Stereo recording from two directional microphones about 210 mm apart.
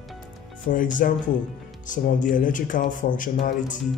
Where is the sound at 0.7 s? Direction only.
40° left (ahead or behind).